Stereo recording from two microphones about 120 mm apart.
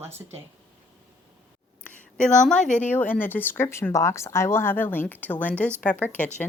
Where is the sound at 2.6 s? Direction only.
90° left.